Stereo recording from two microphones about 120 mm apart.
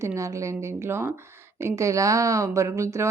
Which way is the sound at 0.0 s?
25° right (ahead or behind).